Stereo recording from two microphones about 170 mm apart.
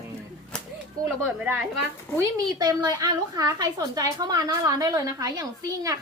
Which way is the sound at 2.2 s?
20° right (ahead or behind).